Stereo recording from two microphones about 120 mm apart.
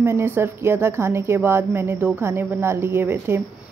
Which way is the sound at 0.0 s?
20° right (ahead or behind).